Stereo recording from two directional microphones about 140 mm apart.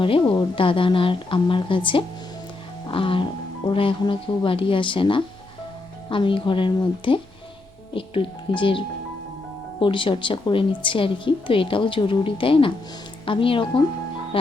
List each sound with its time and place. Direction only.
0.0 s a woman's voice: 40° left (ahead or behind)
9.8 s a woman's voice: 35° left (ahead or behind)